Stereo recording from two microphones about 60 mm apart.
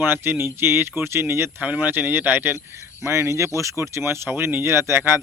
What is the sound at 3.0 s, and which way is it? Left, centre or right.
Speech, right.